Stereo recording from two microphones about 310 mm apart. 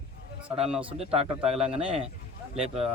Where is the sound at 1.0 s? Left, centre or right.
Centre.